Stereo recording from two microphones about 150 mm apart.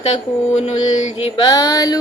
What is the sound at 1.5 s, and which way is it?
Female singing, 25° left (ahead or behind).